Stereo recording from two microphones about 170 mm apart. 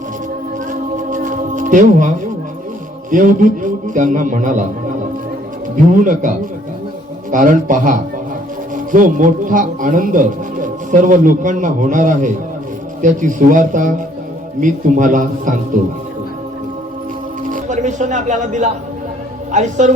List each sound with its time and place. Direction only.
0.7 s music: 50° right (ahead or behind)
3.1 s a man's voice: 50° right (ahead or behind)
5.7 s a man's voice: 50° right (ahead or behind)
17.5 s a man's voice: 45° right (ahead or behind)